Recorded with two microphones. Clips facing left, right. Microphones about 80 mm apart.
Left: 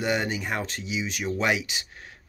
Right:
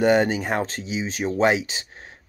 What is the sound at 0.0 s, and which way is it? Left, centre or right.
Speech, right.